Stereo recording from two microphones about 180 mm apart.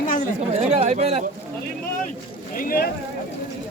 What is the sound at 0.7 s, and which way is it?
Speech, 35° right (ahead or behind).